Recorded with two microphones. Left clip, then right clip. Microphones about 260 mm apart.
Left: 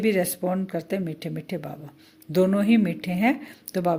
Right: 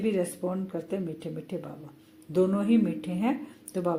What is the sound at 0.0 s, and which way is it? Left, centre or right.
Speech, left.